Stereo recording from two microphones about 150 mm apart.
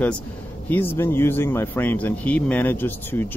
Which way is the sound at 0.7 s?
15° left (ahead or behind).